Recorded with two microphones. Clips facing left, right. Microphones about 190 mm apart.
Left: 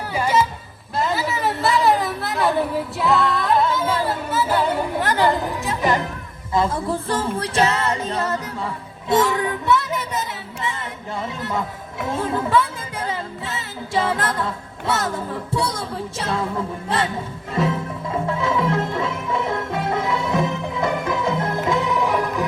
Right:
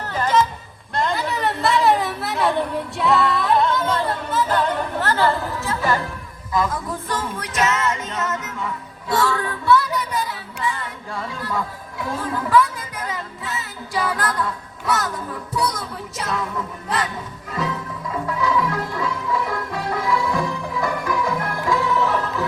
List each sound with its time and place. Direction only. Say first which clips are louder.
0.1 s a sound: even; 10° left (ahead or behind)
6.5 s music: left 2 dB; 30° left (ahead or behind)
9.1 s music: left 3 dB; 20° left (ahead or behind)